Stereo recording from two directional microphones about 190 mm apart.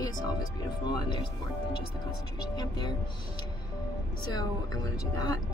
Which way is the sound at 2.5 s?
20° left (ahead or behind).